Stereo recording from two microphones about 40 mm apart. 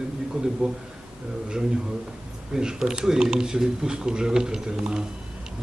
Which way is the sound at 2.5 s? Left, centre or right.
Centre.